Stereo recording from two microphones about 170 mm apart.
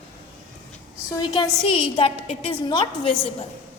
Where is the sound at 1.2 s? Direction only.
25° left (ahead or behind).